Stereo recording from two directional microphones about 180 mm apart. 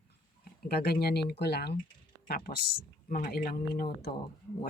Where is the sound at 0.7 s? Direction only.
60° left (ahead or behind).